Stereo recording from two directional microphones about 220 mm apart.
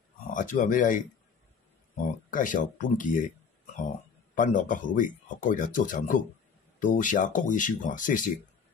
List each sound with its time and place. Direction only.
0.3 s speech: 35° left (ahead or behind)
4.4 s speech: 35° left (ahead or behind)